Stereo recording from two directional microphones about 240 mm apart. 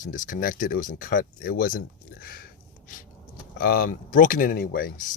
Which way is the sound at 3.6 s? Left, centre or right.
Left.